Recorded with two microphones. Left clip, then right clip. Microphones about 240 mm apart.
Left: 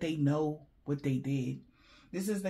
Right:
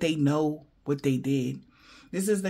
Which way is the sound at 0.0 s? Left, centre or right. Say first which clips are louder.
Right 6 dB; right.